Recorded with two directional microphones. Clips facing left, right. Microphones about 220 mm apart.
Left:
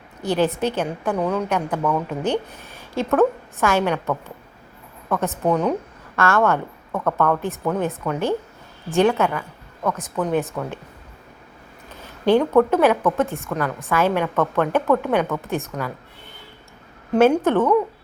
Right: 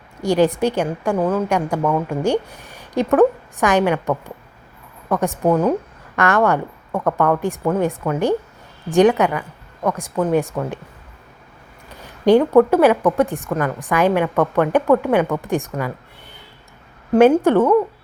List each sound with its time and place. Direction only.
0.2 s a woman's voice: 15° right (ahead or behind)
12.0 s a woman's voice: 15° right (ahead or behind)
17.2 s a woman's voice: 15° right (ahead or behind)